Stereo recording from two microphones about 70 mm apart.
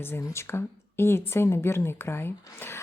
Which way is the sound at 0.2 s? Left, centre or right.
Left.